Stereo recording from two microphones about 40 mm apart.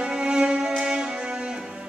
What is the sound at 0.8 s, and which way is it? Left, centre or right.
Music, centre.